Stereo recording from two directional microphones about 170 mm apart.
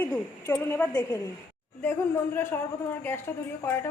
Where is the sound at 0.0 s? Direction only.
10° left (ahead or behind).